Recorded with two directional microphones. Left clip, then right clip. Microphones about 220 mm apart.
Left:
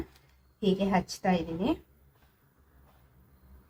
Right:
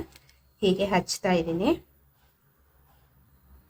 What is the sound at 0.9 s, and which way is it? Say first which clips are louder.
Speech: right 3 dB; 35° right (ahead or behind).